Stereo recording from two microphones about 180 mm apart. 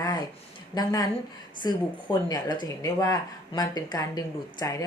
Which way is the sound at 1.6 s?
25° left (ahead or behind).